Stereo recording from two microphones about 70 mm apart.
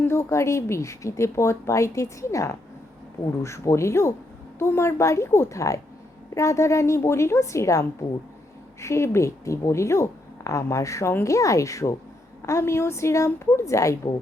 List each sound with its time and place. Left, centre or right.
0.0 s a woman's voice: left